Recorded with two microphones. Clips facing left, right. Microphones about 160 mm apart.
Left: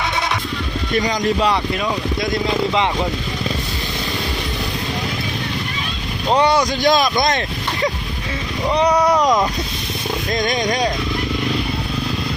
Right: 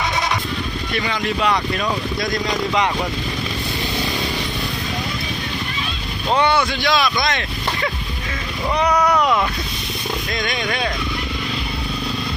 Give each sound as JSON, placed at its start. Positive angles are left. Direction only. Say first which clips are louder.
{"t": 0.9, "sound": "speech", "louder": "left 5 dB", "side_deg": 40}
{"t": 2.2, "sound": "speech", "louder": "left 4 dB", "side_deg": 25}
{"t": 6.3, "sound": "speech", "louder": "left 2 dB", "side_deg": 35}
{"t": 8.7, "sound": "speech", "louder": "left 2 dB", "side_deg": 30}
{"t": 10.3, "sound": "speech", "louder": "left 6 dB", "side_deg": 45}